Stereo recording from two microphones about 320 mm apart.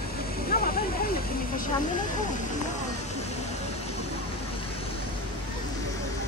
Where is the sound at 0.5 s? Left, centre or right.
Left.